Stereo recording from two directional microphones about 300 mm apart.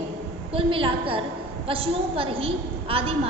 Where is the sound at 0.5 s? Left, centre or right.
Centre.